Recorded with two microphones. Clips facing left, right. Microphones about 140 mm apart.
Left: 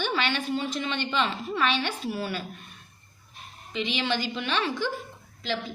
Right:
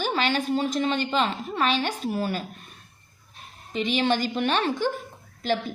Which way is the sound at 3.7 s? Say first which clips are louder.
Right 5 dB; 45° right (ahead or behind).